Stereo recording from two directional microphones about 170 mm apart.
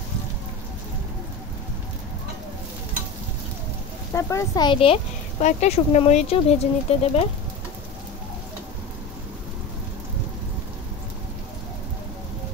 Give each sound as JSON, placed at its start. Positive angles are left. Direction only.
{"t": 4.1, "sound": "speech", "side_deg": 15}